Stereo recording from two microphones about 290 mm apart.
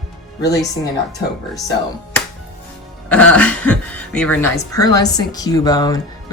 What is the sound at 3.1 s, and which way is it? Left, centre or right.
Speech, centre.